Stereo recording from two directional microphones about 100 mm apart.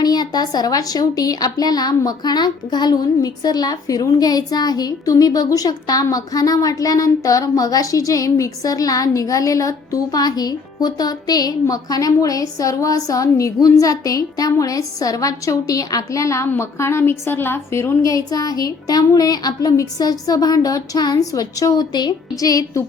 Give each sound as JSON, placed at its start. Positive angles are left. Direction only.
{"t": 0.0, "sound": "a woman's voice", "side_deg": 40}